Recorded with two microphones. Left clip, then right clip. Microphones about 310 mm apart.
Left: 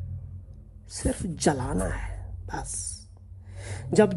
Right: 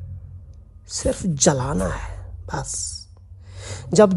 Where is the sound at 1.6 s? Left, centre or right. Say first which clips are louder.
Right 6 dB; left.